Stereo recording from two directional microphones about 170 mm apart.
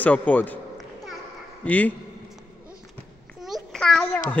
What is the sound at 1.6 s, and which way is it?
Speech, 10° left (ahead or behind).